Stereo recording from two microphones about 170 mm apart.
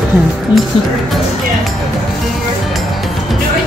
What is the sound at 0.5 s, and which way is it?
Speech, 25° left (ahead or behind).